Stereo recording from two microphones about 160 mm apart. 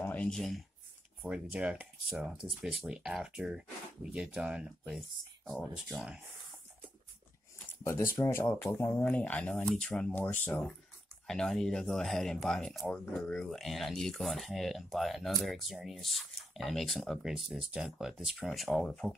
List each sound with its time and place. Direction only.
0.0 s speech: 10° left (ahead or behind)
7.8 s speech: 15° left (ahead or behind)